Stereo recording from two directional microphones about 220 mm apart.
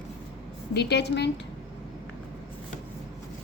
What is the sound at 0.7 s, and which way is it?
Speech, 50° left (ahead or behind).